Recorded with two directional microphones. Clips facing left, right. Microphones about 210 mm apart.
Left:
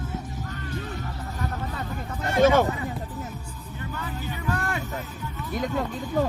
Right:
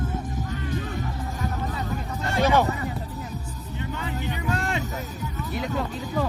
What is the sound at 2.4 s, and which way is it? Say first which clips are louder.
Speech: left 3 dB; 50° left (ahead or behind).